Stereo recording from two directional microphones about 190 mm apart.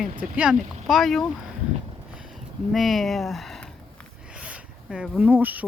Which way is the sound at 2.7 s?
Centre (ahead or behind).